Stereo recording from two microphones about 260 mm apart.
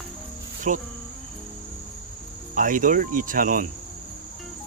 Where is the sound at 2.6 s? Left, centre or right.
Right.